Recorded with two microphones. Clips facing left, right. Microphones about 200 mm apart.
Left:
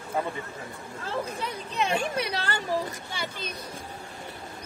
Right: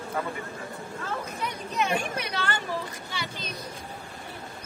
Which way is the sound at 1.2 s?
30° left (ahead or behind).